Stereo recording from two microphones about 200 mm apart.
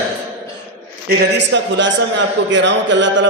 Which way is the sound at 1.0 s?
60° right (ahead or behind).